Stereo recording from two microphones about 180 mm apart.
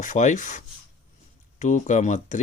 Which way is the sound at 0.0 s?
45° left (ahead or behind).